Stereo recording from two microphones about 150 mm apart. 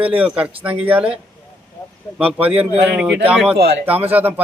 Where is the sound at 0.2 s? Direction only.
5° right (ahead or behind).